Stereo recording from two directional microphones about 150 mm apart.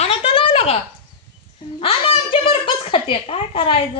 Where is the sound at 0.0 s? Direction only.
40° left (ahead or behind).